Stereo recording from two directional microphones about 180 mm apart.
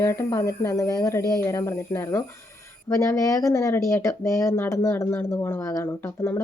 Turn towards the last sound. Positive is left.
turn(degrees=15)  # may be behind; listen again after turning